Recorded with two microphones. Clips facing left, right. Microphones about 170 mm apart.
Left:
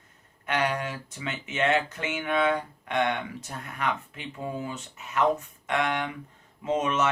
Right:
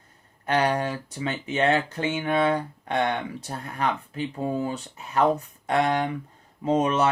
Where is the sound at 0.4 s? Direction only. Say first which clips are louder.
Right 4 dB; 35° right (ahead or behind).